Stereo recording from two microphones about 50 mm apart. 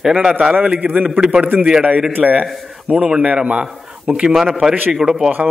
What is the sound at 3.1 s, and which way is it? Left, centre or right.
Speech, centre.